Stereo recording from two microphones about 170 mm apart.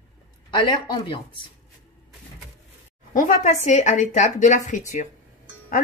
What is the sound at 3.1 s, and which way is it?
A woman's voice, 45° left (ahead or behind).